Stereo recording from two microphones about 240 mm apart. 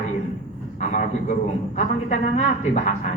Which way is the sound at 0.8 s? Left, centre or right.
Left.